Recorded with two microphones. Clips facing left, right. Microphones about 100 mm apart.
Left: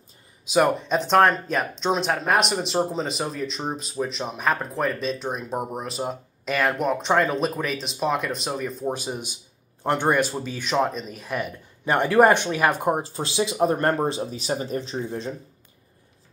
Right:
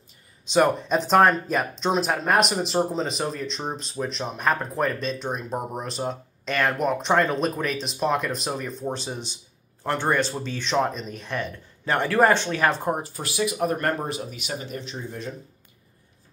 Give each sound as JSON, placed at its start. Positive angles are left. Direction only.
{"t": 0.5, "sound": "speech", "side_deg": 0}